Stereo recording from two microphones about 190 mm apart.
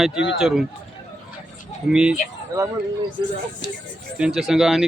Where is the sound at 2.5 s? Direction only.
15° right (ahead or behind).